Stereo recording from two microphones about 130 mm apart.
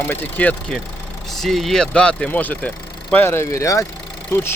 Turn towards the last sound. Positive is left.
turn(degrees=20)  # may be behind; listen again after turning